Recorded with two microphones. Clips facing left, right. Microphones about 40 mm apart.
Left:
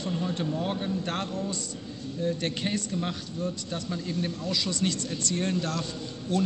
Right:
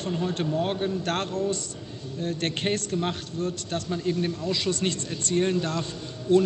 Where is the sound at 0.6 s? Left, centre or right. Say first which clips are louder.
Right 4 dB; right.